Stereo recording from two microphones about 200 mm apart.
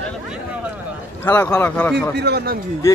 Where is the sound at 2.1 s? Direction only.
55° right (ahead or behind).